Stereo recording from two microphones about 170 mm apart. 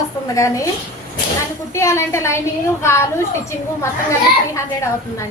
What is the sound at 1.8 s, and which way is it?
A woman's voice, 15° left (ahead or behind).